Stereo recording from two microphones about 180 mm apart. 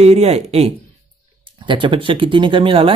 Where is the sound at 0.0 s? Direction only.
35° right (ahead or behind).